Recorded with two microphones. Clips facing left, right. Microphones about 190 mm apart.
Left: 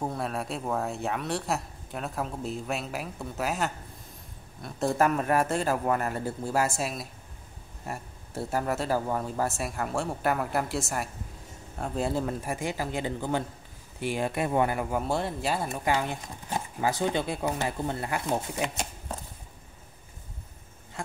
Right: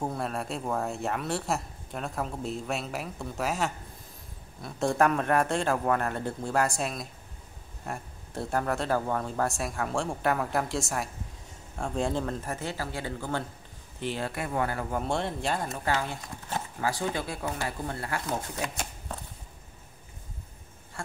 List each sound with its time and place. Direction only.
0.0 s speech: centre (ahead or behind); by 19.1 s 20° left (ahead or behind)